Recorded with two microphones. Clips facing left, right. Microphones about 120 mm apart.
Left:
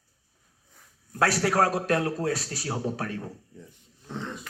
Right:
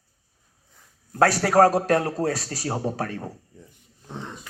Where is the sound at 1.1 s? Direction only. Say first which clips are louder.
Right 6 dB; 40° right (ahead or behind).